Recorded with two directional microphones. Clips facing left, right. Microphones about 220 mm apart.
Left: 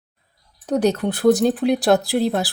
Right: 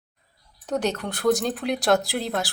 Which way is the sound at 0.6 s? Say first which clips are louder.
Left 7 dB; 35° left (ahead or behind).